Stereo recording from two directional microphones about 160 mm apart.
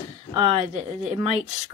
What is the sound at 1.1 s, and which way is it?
Speech, 45° right (ahead or behind).